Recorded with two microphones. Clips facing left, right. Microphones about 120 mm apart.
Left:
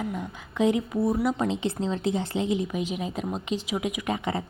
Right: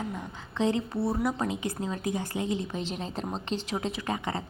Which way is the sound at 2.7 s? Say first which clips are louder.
Left 4 dB; 10° left (ahead or behind).